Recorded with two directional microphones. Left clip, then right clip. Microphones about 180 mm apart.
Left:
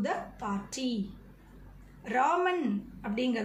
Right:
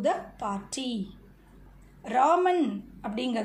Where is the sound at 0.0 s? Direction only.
30° right (ahead or behind).